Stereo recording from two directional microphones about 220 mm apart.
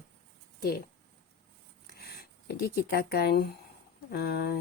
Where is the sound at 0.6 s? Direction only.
45° left (ahead or behind).